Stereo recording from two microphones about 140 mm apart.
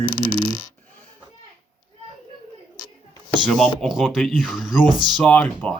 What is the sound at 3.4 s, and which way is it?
Speech, centre (ahead or behind).